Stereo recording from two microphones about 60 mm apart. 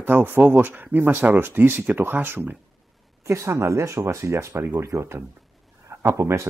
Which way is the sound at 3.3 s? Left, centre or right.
Right.